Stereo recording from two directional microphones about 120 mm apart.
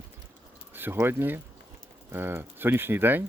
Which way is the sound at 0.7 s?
20° right (ahead or behind).